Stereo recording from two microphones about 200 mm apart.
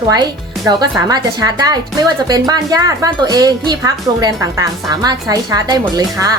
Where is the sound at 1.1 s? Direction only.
20° right (ahead or behind).